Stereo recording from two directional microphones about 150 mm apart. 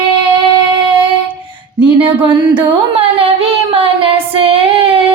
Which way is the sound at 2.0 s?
35° right (ahead or behind).